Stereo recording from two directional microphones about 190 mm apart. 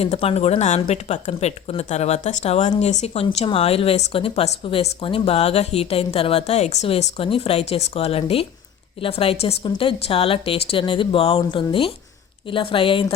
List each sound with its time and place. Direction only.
0.0 s a woman's voice: 30° left (ahead or behind)